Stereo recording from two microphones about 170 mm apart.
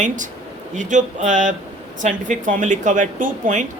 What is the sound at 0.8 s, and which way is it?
A woman's voice, 50° right (ahead or behind).